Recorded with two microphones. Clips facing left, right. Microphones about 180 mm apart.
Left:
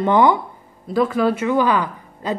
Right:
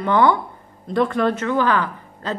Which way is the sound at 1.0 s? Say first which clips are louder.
Left 1 dB; 5° left (ahead or behind).